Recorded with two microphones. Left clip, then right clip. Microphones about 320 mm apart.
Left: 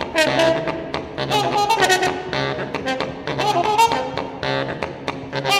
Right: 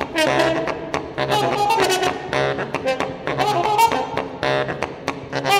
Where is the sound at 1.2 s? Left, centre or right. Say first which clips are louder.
Even; centre.